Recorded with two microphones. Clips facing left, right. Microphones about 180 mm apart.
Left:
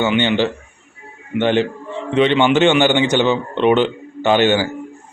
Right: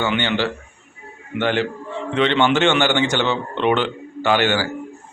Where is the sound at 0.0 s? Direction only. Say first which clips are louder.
Left 4 dB; 20° left (ahead or behind).